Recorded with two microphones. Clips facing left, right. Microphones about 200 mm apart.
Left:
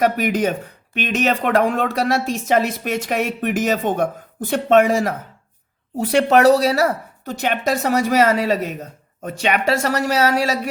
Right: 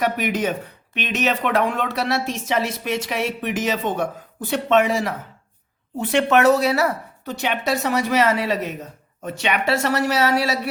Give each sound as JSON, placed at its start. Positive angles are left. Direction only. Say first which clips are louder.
{"t": 0.0, "sound": "a woman's voice", "louder": "left 4 dB", "side_deg": 45}